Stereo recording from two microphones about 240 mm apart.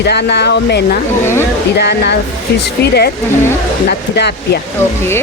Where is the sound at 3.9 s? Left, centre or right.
Left.